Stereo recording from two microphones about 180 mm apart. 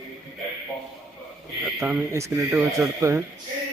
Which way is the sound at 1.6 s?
5° right (ahead or behind).